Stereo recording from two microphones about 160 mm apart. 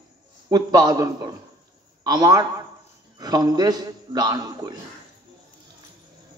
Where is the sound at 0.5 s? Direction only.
25° right (ahead or behind).